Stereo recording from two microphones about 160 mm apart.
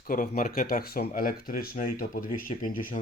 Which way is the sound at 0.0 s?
60° left (ahead or behind).